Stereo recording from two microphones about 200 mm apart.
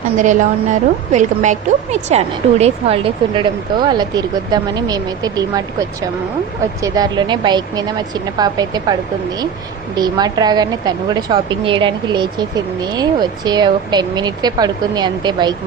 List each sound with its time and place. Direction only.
0.2 s speech: 40° right (ahead or behind); by 5.6 s 20° right (ahead or behind)
6.8 s speech: 20° right (ahead or behind)